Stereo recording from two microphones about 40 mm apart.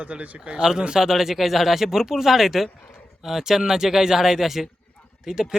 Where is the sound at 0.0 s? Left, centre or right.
Right.